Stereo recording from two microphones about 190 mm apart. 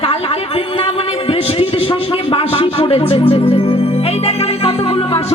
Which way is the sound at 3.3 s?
30° left (ahead or behind).